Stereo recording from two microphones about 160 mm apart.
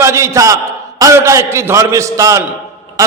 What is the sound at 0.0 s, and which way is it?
A man's voice, 15° right (ahead or behind).